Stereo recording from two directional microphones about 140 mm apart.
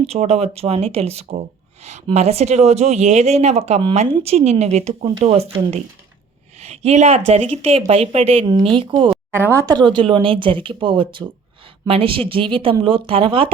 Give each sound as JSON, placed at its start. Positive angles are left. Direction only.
{"t": 0.0, "sound": "speech", "side_deg": -45}
{"t": 9.3, "sound": "speech", "side_deg": -15}
{"t": 9.7, "sound": "speech", "side_deg": -35}